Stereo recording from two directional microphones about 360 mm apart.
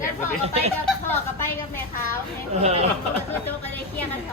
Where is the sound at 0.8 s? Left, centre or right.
Centre.